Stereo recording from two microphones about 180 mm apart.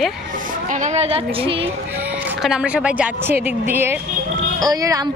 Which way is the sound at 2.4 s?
5° right (ahead or behind).